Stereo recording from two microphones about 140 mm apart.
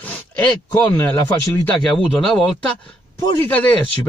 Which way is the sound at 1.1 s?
15° left (ahead or behind).